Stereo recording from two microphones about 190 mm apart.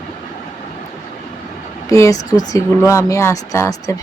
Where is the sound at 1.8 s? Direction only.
15° left (ahead or behind).